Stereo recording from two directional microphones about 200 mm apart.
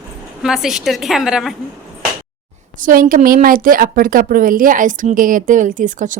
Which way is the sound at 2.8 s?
45° right (ahead or behind).